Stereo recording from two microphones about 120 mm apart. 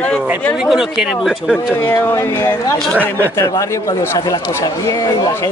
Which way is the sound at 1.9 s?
20° left (ahead or behind).